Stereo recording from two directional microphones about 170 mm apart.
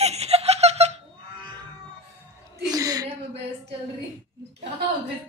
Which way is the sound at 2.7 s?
20° right (ahead or behind).